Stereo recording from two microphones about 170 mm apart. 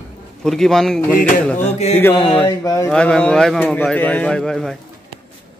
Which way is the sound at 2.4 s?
20° left (ahead or behind).